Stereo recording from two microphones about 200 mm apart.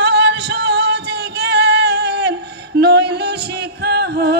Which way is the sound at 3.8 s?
55° right (ahead or behind).